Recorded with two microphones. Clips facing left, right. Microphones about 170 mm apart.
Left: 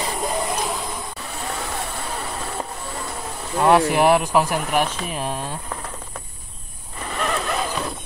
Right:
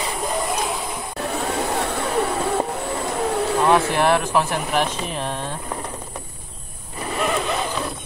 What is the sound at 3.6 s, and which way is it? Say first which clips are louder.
Speech: left 4 dB; 10° left (ahead or behind).